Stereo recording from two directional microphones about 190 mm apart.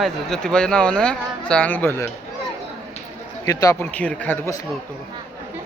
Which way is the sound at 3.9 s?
5° left (ahead or behind).